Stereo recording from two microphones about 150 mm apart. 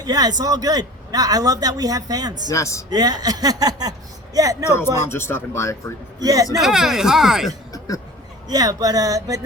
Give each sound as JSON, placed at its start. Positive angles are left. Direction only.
{"t": 0.0, "sound": "a man's voice", "side_deg": -25}
{"t": 2.5, "sound": "speech", "side_deg": 20}
{"t": 2.9, "sound": "a man's voice", "side_deg": -25}
{"t": 4.7, "sound": "speech", "side_deg": 15}
{"t": 6.1, "sound": "a man's voice", "side_deg": -25}
{"t": 6.6, "sound": "speech", "side_deg": -5}
{"t": 7.7, "sound": "cough", "side_deg": 20}
{"t": 8.4, "sound": "a man's voice", "side_deg": -25}